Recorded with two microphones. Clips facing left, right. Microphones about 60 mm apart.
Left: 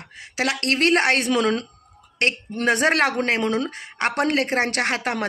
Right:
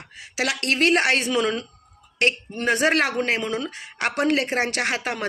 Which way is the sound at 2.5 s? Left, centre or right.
Left.